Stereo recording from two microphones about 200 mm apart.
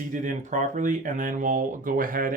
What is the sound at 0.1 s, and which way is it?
Speech, 40° right (ahead or behind).